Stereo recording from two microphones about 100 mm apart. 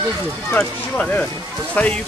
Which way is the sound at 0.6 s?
10° left (ahead or behind).